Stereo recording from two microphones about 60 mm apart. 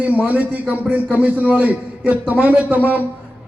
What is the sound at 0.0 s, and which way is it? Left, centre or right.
A man's voice, right.